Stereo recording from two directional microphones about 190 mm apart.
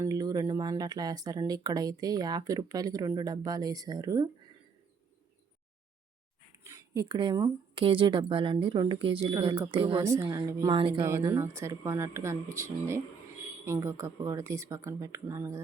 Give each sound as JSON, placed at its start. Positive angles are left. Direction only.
{"t": 0.0, "sound": "speech", "side_deg": -20}
{"t": 6.7, "sound": "speech", "side_deg": -20}
{"t": 10.0, "sound": "speech", "side_deg": -15}
{"t": 11.0, "sound": "speech", "side_deg": -15}